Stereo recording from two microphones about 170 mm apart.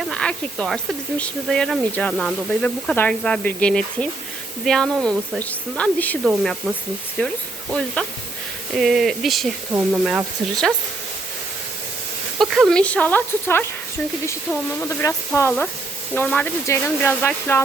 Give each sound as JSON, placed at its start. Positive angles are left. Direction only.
{"t": 0.1, "sound": "speech", "side_deg": 5}
{"t": 8.7, "sound": "speech", "side_deg": 0}
{"t": 12.4, "sound": "speech", "side_deg": 0}
{"t": 14.8, "sound": "speech", "side_deg": 15}